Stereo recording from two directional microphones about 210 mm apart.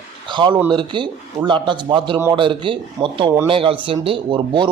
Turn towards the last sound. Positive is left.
turn(degrees=-25)  # may be behind; listen again after turning